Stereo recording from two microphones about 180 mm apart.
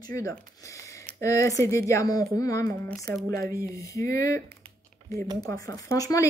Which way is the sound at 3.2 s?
15° left (ahead or behind).